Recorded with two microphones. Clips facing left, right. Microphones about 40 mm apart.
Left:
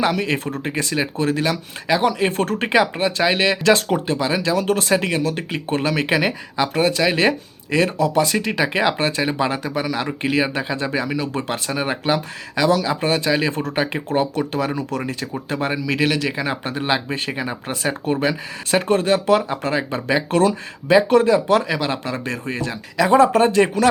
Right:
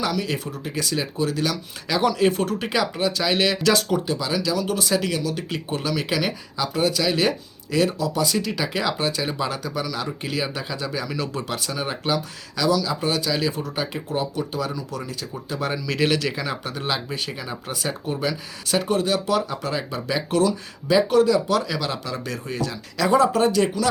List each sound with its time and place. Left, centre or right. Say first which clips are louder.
0.0 s speech: left 5 dB; left
1.9 s speech: left 2 dB; left
2.3 s speech: left 5 dB; left
13.5 s speech: left 5 dB; left
15.7 s speech: left 1 dB; left